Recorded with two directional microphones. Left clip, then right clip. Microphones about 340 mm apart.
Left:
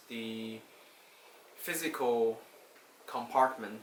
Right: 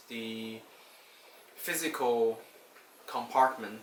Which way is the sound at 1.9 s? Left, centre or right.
Centre.